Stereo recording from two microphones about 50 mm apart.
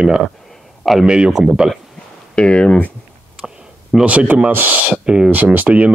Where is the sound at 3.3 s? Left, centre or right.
Centre.